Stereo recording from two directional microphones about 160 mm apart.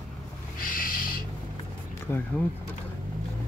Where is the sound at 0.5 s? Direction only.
60° left (ahead or behind).